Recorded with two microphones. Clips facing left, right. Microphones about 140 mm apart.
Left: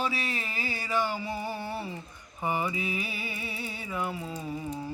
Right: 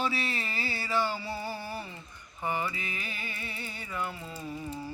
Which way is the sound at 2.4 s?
10° left (ahead or behind).